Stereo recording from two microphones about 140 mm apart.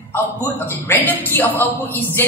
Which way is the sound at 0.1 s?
15° left (ahead or behind).